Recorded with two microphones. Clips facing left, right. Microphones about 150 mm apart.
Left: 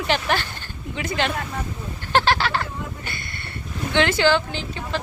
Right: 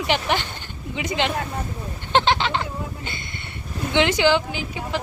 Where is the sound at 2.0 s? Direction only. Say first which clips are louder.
Even; 20° right (ahead or behind).